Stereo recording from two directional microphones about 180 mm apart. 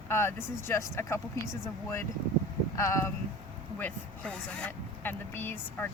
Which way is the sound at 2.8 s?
15° left (ahead or behind).